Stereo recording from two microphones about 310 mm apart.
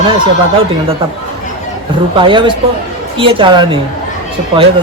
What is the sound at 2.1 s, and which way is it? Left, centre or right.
A woman's voice, centre.